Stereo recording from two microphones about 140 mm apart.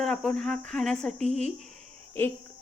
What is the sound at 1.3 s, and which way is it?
Speech, 55° right (ahead or behind).